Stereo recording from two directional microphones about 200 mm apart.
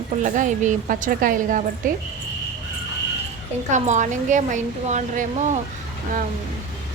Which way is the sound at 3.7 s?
35° right (ahead or behind).